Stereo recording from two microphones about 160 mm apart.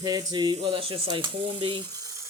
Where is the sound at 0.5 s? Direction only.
35° right (ahead or behind).